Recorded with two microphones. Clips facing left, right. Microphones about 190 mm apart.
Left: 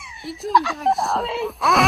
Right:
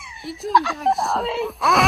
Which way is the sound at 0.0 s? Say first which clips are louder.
Even; centre (ahead or behind).